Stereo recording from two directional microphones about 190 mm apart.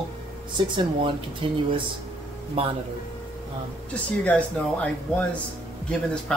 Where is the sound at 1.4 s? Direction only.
30° right (ahead or behind).